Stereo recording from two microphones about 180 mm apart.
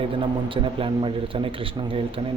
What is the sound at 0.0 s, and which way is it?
A man's voice, 30° right (ahead or behind).